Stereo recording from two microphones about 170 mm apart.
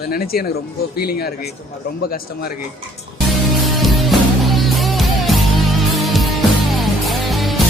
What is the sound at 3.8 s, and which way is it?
Music, centre (ahead or behind).